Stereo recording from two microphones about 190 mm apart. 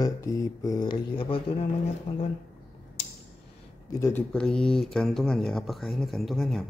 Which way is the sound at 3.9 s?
15° left (ahead or behind).